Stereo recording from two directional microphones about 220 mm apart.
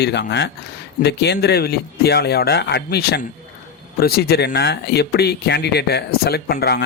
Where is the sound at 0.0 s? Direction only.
50° left (ahead or behind).